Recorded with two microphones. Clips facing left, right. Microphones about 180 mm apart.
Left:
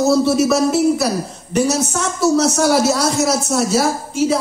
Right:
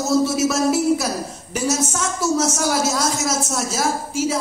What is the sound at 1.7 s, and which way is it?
A man's voice, 65° left (ahead or behind).